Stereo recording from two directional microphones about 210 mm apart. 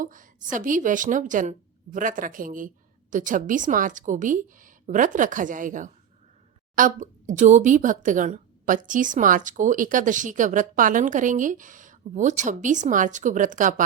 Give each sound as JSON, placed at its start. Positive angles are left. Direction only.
{"t": 0.0, "sound": "a woman's voice", "side_deg": -40}